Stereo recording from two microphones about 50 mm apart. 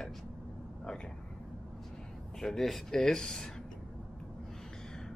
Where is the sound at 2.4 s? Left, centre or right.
Centre.